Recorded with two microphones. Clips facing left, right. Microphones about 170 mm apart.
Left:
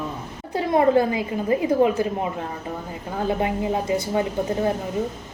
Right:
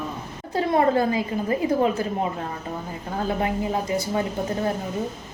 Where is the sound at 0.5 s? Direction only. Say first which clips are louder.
Left 2 dB; 20° left (ahead or behind).